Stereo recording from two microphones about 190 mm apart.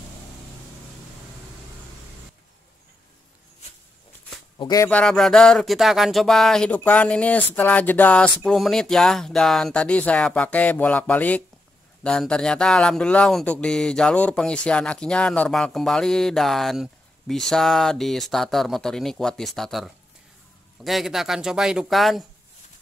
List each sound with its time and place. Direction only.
4.6 s speech: 20° left (ahead or behind)
4.8 s speech: 5° left (ahead or behind)